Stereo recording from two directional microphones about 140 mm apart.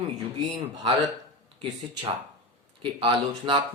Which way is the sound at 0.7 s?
30° right (ahead or behind).